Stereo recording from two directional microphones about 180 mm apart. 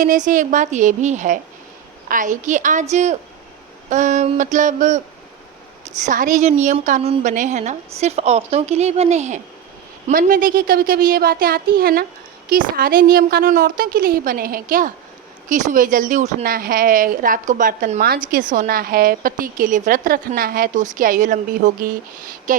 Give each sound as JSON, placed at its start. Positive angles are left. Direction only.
{"t": 0.0, "sound": "a woman's voice", "side_deg": -45}
{"t": 6.1, "sound": "a woman's voice", "side_deg": -45}
{"t": 10.1, "sound": "a woman's voice", "side_deg": -50}
{"t": 18.0, "sound": "a woman's voice", "side_deg": -55}